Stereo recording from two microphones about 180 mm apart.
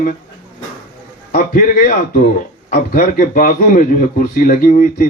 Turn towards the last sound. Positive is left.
turn(degrees=45)  # may be behind; listen again after turning